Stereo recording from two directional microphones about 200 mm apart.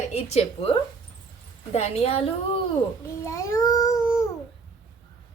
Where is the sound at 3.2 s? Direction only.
15° left (ahead or behind).